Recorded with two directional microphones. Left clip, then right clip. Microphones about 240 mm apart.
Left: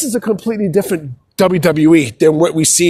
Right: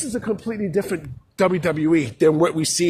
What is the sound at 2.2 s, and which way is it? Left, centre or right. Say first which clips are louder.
Speech: left 6 dB; centre.